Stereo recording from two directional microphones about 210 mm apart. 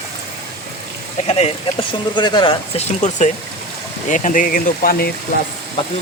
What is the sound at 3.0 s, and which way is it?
Speech, 35° left (ahead or behind).